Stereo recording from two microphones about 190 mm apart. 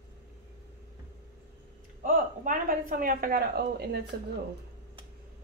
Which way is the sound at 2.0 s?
45° right (ahead or behind).